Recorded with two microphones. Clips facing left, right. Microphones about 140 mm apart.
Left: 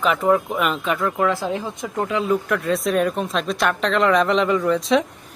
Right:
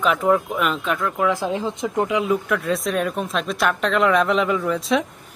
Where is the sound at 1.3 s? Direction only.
15° right (ahead or behind).